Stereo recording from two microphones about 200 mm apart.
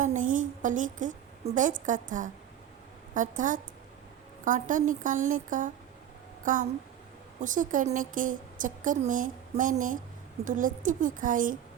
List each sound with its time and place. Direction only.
0.0 s a woman's voice: 40° right (ahead or behind)